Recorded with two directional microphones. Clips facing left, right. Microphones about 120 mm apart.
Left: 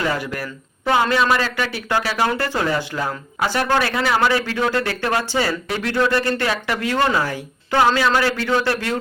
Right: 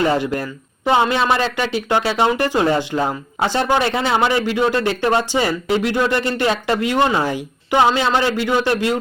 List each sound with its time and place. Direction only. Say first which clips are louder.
0.0 s speech: right 5 dB; 25° right (ahead or behind)